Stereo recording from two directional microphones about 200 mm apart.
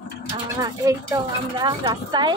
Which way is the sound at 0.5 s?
15° right (ahead or behind).